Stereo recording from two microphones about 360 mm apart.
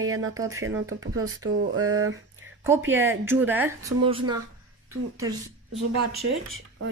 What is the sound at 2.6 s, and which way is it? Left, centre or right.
Speech, centre.